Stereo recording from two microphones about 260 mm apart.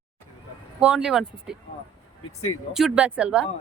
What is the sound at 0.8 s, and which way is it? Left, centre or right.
Speech, centre.